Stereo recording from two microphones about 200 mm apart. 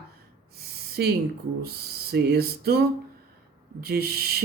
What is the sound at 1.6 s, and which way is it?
Speech, 50° right (ahead or behind).